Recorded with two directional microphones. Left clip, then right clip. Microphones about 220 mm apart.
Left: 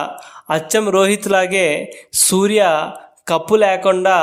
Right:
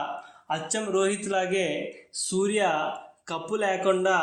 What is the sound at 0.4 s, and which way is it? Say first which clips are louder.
A man's voice: left 13 dB; 50° left (ahead or behind).